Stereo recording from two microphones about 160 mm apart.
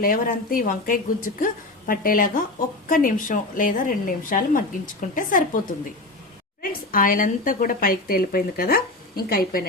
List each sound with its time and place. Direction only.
0.0 s a woman's voice: 60° left (ahead or behind)
6.6 s a woman's voice: 60° left (ahead or behind)